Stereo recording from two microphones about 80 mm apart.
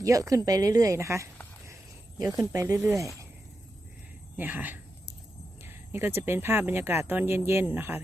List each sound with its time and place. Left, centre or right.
0.0 s speech: right
2.1 s speech: right
4.4 s speech: right